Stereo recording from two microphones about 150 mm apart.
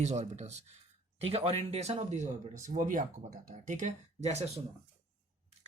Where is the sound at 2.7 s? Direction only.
60° right (ahead or behind); by 4.4 s 45° right (ahead or behind).